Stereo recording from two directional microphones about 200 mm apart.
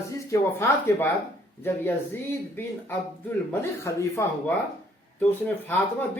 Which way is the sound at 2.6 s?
10° left (ahead or behind).